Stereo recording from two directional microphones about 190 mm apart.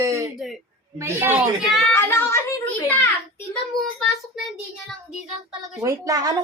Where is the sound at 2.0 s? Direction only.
10° left (ahead or behind).